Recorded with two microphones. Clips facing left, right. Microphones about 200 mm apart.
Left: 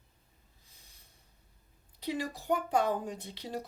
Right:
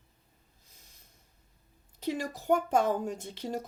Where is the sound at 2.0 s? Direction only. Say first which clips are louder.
Right 2 dB; 45° right (ahead or behind).